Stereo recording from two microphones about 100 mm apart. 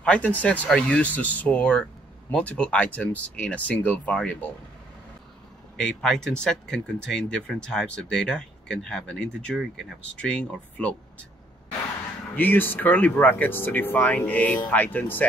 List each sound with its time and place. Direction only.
0.0 s speech: 15° left (ahead or behind)
5.8 s speech: 5° left (ahead or behind)
12.4 s speech: 20° left (ahead or behind)